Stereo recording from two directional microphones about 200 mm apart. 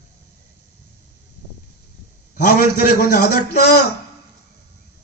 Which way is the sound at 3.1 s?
50° left (ahead or behind).